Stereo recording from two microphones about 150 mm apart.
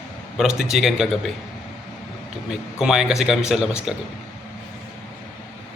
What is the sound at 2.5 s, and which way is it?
A man's voice, centre (ahead or behind).